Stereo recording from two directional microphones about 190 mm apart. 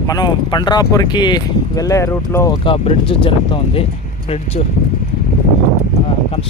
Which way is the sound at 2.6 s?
30° left (ahead or behind).